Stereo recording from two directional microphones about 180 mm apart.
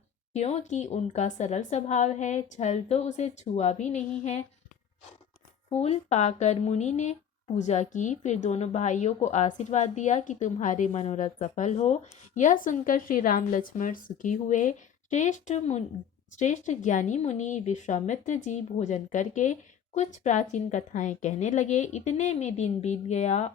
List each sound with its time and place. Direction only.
0.3 s speech: 35° left (ahead or behind)
5.6 s speech: 35° left (ahead or behind)